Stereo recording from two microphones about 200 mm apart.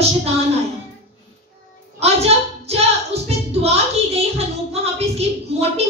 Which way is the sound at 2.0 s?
30° right (ahead or behind).